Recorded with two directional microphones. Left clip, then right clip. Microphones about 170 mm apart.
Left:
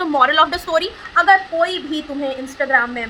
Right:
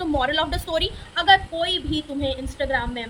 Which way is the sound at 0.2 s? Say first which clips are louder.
Left 12 dB; 15° right (ahead or behind).